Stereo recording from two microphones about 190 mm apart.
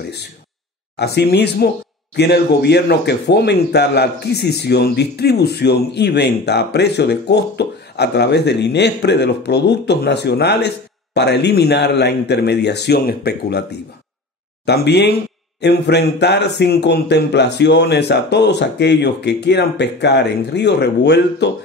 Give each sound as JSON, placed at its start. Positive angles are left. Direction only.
{"t": 0.9, "sound": "speech", "side_deg": 60}